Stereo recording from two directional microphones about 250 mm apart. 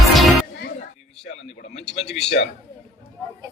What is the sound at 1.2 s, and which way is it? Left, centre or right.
Speech, left.